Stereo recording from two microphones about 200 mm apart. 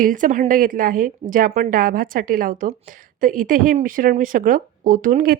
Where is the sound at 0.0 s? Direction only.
40° right (ahead or behind).